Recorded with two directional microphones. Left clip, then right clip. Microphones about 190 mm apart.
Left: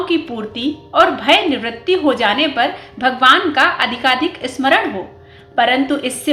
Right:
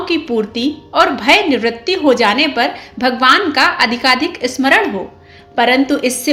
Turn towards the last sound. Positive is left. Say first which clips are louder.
# right 2 dB
turn(degrees=-40)  # may be behind; listen again after turning